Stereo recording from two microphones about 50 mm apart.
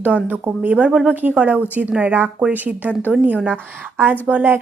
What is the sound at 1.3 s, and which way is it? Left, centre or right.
A woman's voice, right.